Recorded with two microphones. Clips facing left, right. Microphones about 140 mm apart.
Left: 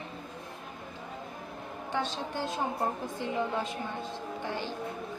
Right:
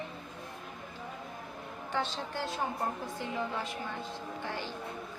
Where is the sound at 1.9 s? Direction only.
15° left (ahead or behind).